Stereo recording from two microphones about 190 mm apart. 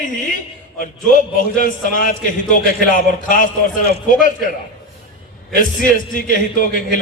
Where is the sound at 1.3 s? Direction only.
45° left (ahead or behind).